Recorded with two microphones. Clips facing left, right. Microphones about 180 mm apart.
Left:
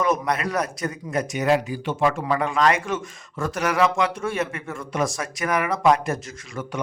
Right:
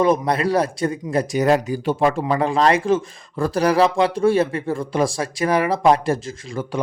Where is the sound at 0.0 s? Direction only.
30° right (ahead or behind).